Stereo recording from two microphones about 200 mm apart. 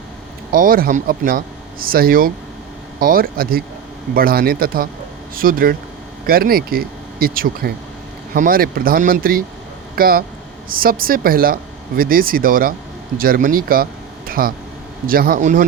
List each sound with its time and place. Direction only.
0.5 s speech: 45° right (ahead or behind)
14.3 s a sound: 45° right (ahead or behind)
15.0 s speech: 45° right (ahead or behind)